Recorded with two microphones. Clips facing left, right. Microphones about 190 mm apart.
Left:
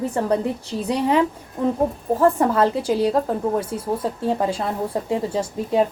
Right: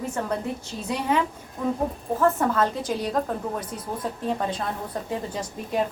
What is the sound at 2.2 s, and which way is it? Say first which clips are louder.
Speech: left 4 dB; 30° left (ahead or behind).